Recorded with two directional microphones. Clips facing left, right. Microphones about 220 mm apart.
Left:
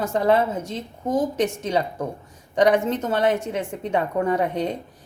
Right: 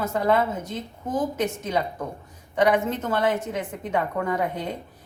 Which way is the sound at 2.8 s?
30° left (ahead or behind).